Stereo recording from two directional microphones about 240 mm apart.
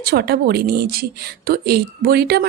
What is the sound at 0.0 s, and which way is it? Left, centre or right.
A woman's voice, right.